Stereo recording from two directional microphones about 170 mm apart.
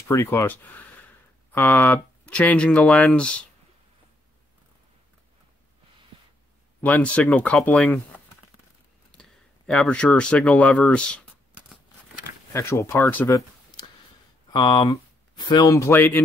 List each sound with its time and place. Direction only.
0.1 s speech: 15° left (ahead or behind)
6.8 s speech: 10° left (ahead or behind)
12.5 s speech: 15° left (ahead or behind)
14.5 s speech: 25° left (ahead or behind)